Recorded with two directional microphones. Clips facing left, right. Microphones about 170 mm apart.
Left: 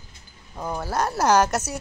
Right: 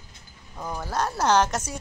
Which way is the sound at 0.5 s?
5° left (ahead or behind).